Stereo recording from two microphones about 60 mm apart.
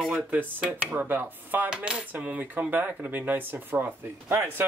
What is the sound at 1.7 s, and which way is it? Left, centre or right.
Cutlery, centre.